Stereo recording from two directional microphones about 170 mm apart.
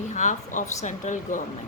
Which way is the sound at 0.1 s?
45° left (ahead or behind).